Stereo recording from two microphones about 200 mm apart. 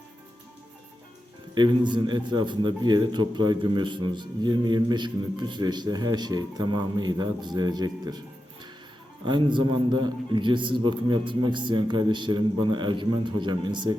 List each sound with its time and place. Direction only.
1.5 s a man's voice: 20° right (ahead or behind)
9.2 s a man's voice: 25° right (ahead or behind)